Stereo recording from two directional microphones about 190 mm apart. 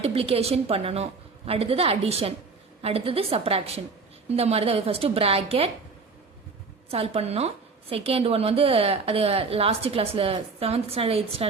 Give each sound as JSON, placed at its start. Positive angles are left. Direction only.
{"t": 0.0, "sound": "a woman's voice", "side_deg": -30}
{"t": 6.9, "sound": "a woman's voice", "side_deg": -30}